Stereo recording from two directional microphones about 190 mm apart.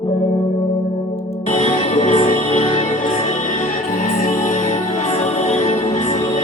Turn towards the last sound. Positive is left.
turn(degrees=35)  # may be behind; listen again after turning